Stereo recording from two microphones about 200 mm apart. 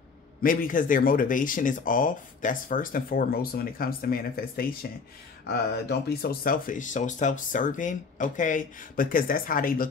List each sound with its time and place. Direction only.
0.4 s speech: 45° left (ahead or behind)